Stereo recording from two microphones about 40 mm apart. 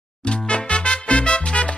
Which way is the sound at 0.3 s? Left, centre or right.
Left.